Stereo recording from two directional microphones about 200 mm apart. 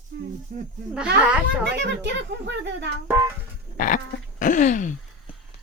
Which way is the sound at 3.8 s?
40° left (ahead or behind).